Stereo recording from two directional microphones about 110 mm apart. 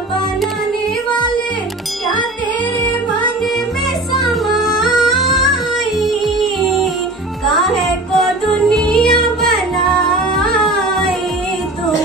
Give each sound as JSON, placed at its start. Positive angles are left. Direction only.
{"t": 4.2, "sound": "music", "side_deg": 0}